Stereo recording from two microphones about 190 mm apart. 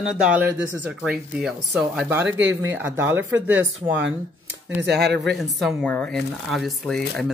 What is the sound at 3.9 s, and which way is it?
Speech, 70° right (ahead or behind).